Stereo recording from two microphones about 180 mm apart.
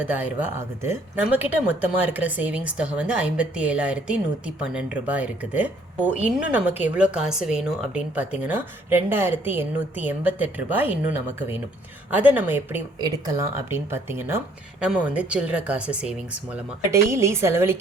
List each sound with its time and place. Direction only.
0.1 s a woman's voice: 10° right (ahead or behind)
13.0 s a woman's voice: 20° right (ahead or behind)